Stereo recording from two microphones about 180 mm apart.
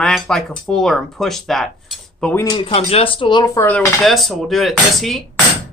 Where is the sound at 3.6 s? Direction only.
10° left (ahead or behind).